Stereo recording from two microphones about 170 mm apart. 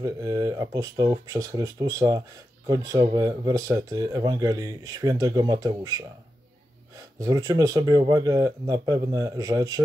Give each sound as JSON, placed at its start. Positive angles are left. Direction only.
{"t": 0.0, "sound": "speech", "side_deg": -20}
{"t": 7.2, "sound": "speech", "side_deg": -20}